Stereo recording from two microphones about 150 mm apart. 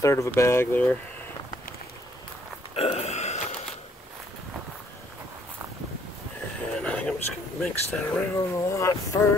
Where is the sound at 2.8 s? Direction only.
45° left (ahead or behind).